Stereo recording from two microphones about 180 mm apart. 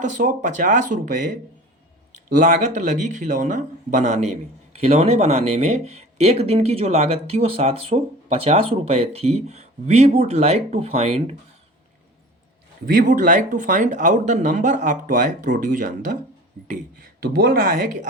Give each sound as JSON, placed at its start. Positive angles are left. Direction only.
{"t": 0.0, "sound": "speech", "side_deg": -45}
{"t": 12.8, "sound": "speech", "side_deg": -50}
{"t": 17.2, "sound": "speech", "side_deg": -60}